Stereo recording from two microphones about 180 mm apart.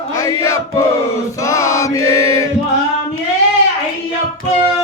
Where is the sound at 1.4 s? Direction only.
15° left (ahead or behind).